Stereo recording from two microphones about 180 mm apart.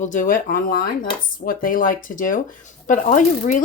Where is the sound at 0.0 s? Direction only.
45° left (ahead or behind).